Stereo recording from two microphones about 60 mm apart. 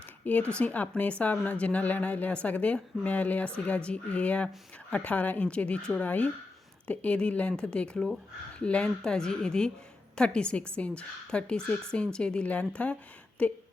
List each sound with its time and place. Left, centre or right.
0.3 s a woman's voice: left